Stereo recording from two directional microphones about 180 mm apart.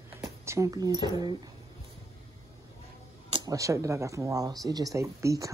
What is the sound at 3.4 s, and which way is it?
Speech, 20° right (ahead or behind).